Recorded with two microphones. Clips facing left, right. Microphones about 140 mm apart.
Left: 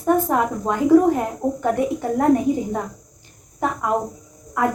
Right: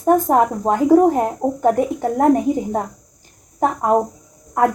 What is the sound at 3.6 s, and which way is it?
Speech, 40° right (ahead or behind).